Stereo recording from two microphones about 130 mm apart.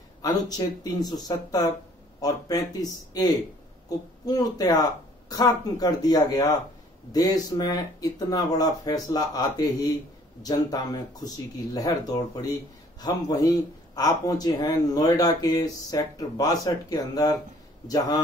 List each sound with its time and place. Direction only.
0.2 s speech: 30° left (ahead or behind)
4.3 s speech: 30° left (ahead or behind)